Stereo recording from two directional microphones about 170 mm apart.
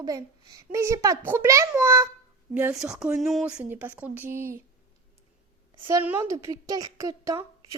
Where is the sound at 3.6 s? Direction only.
10° right (ahead or behind).